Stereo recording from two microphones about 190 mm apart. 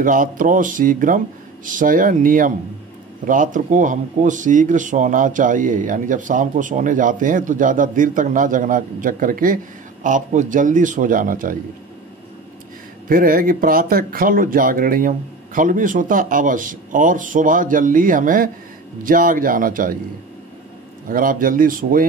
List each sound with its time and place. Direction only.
0.0 s speech: 45° right (ahead or behind)
13.1 s speech: 45° right (ahead or behind)
21.1 s speech: 45° right (ahead or behind)